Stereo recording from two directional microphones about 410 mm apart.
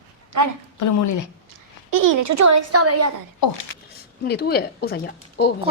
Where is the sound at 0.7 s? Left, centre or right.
Left.